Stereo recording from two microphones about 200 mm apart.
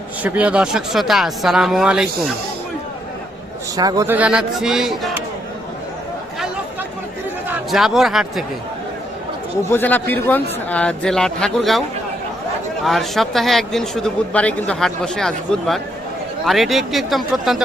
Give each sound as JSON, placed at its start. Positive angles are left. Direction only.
{"t": 0.2, "sound": "speech", "side_deg": -5}
{"t": 3.8, "sound": "speech", "side_deg": -20}
{"t": 7.4, "sound": "speech", "side_deg": 0}
{"t": 9.6, "sound": "speech", "side_deg": 10}
{"t": 12.8, "sound": "speech", "side_deg": 0}